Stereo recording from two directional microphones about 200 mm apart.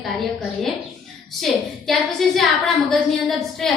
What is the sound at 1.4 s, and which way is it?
A woman's voice, centre (ahead or behind).